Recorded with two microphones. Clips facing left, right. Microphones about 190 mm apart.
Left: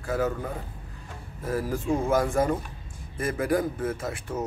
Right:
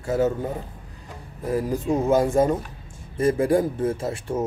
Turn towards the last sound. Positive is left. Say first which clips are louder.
# right 5 dB
turn(degrees=-25)  # may be behind; listen again after turning